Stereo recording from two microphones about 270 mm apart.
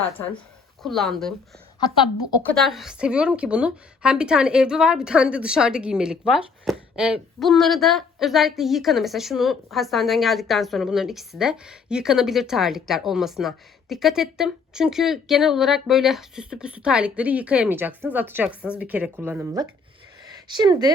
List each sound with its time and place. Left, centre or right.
0.8 s speech: centre
2.5 s speech: centre